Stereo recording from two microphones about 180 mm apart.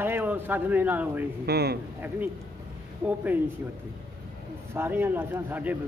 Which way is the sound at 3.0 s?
10° right (ahead or behind).